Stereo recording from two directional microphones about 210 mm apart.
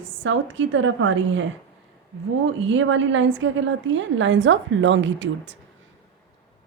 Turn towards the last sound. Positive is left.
turn(degrees=-60)  # may be behind; listen again after turning